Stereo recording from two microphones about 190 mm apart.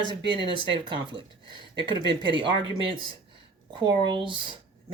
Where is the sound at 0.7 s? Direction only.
25° right (ahead or behind).